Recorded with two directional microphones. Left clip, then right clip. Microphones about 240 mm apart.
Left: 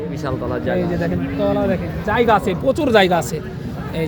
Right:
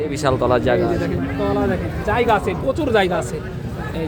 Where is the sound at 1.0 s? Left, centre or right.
Left.